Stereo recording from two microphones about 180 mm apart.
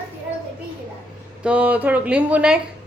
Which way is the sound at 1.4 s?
10° right (ahead or behind).